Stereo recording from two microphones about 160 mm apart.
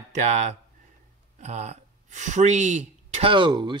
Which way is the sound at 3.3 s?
30° right (ahead or behind).